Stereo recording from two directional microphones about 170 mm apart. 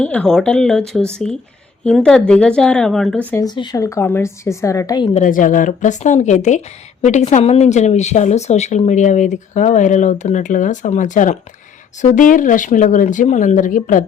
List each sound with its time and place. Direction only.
0.0 s speech: 5° left (ahead or behind)
3.4 s a woman's voice: 25° left (ahead or behind)
5.1 s speech: 50° left (ahead or behind)